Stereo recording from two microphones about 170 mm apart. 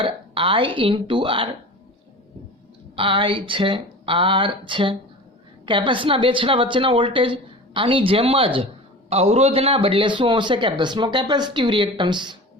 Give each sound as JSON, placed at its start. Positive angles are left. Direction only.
{"t": 0.0, "sound": "a woman's voice", "side_deg": -30}
{"t": 2.9, "sound": "a woman's voice", "side_deg": -30}